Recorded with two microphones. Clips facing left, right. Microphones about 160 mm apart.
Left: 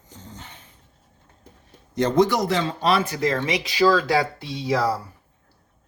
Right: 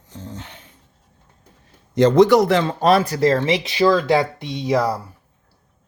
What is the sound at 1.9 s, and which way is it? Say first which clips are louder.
Speech: right 7 dB; 80° right.